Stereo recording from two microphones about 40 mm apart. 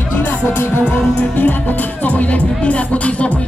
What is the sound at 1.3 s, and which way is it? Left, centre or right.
Music, left.